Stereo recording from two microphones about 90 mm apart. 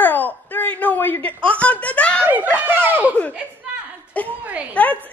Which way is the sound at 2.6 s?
25° right (ahead or behind).